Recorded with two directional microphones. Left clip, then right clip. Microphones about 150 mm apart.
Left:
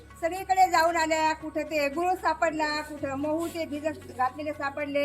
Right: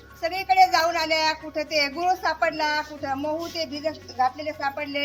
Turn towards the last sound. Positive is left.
turn(degrees=5)  # may be behind; listen again after turning